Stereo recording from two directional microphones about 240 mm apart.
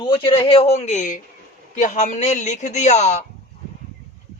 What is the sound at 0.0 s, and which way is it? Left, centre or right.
A man's voice, left.